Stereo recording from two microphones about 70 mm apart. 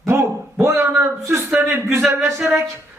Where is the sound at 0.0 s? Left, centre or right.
Right.